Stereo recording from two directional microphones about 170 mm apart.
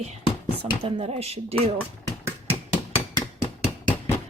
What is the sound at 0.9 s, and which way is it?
Speech, 35° right (ahead or behind).